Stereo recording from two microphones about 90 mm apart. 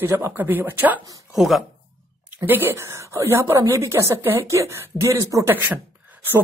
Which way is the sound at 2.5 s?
25° right (ahead or behind).